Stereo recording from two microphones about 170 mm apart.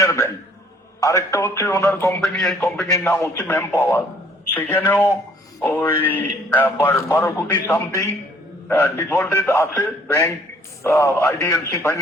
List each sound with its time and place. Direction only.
0.0 s a sound: 15° left (ahead or behind)
0.9 s a man's voice: 15° left (ahead or behind)
2.2 s a man's voice: centre (ahead or behind)
2.8 s a man's voice: 15° left (ahead or behind)